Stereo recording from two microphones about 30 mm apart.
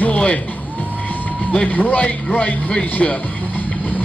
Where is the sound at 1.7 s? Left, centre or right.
Left.